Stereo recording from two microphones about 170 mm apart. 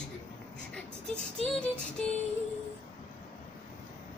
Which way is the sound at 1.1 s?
5° left (ahead or behind).